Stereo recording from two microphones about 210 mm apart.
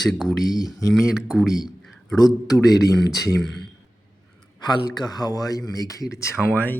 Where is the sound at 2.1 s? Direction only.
20° left (ahead or behind).